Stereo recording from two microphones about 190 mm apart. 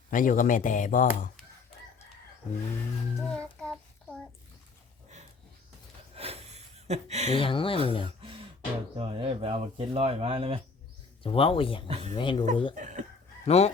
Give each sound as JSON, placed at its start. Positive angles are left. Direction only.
{"t": 0.1, "sound": "speech", "side_deg": 45}
{"t": 3.2, "sound": "a child's voice", "side_deg": 5}
{"t": 6.1, "sound": "a sound", "side_deg": -30}
{"t": 6.8, "sound": "speech", "side_deg": -35}
{"t": 7.3, "sound": "speech", "side_deg": 25}
{"t": 9.0, "sound": "speech", "side_deg": -30}
{"t": 11.2, "sound": "speech", "side_deg": 30}
{"t": 11.9, "sound": "speech", "side_deg": -35}
{"t": 12.1, "sound": "speech", "side_deg": 25}
{"t": 12.7, "sound": "speech", "side_deg": -40}
{"t": 13.4, "sound": "chicken", "side_deg": 35}